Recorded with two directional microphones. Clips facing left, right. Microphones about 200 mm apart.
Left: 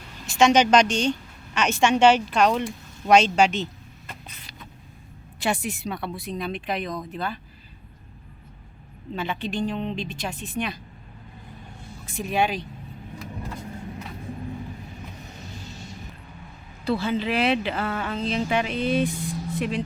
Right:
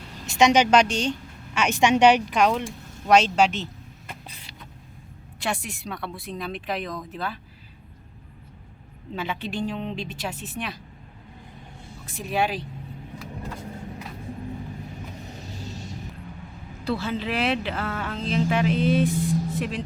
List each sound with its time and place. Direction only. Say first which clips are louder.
0.3 s a woman's voice: left 1 dB; 15° right (ahead or behind)
4.3 s vehicle: right 1 dB; 30° right (ahead or behind)
5.4 s speech: left 4 dB; centre (ahead or behind)
9.1 s a woman's voice: left 1 dB; 10° right (ahead or behind)
12.0 s speech: left 1 dB; centre (ahead or behind)
16.8 s speech: left 3 dB; centre (ahead or behind)